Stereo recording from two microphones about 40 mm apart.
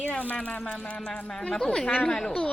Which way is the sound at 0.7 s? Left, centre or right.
Centre.